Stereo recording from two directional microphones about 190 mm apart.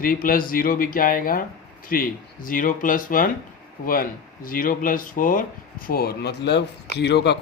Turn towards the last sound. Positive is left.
turn(degrees=60)  # may be behind; listen again after turning